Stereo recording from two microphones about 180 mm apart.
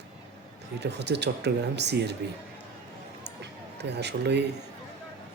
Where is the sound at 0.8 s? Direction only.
70° right (ahead or behind).